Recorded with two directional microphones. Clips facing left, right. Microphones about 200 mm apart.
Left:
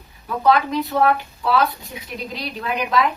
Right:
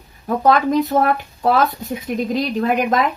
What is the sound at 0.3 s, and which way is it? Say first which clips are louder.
Speech: right 3 dB; 45° right (ahead or behind).